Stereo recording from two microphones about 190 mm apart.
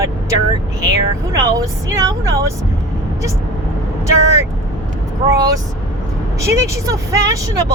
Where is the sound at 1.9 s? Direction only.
15° right (ahead or behind).